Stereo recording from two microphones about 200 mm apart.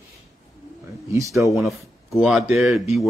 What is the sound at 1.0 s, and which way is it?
Speech, 15° right (ahead or behind).